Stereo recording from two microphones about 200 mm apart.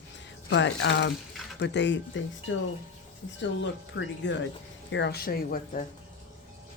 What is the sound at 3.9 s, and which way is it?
Speech, 65° left (ahead or behind).